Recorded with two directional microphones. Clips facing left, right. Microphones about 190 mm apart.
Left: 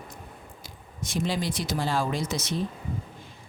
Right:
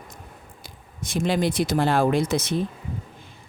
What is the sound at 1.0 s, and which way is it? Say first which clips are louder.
Speech: right 5 dB; 55° right (ahead or behind).